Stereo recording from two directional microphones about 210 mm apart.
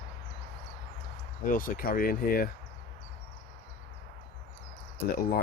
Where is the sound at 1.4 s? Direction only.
40° left (ahead or behind).